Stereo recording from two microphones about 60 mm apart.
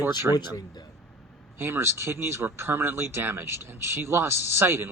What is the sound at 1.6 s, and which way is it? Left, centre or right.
Speech, right.